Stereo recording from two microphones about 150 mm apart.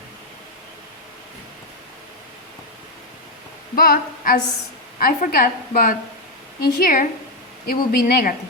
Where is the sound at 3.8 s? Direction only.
80° left; by 7.1 s 65° left (ahead or behind).